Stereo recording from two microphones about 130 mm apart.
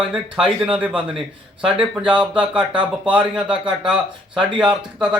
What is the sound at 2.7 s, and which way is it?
Speech, 10° right (ahead or behind).